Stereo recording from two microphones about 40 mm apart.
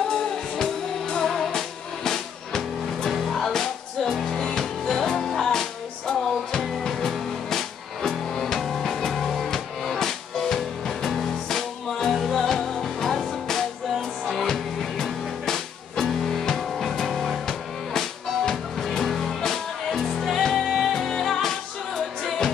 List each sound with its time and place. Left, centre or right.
0.1 s music: left
1.3 s music: centre
3.3 s music: centre